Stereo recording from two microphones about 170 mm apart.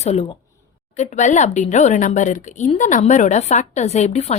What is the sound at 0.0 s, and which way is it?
Speech, 40° left (ahead or behind).